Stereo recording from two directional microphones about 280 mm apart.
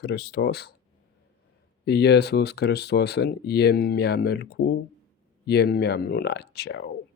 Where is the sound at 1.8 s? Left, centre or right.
Left.